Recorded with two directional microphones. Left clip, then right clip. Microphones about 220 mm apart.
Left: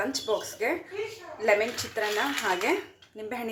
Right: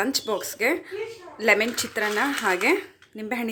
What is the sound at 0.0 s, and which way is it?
A woman's voice, 45° right (ahead or behind).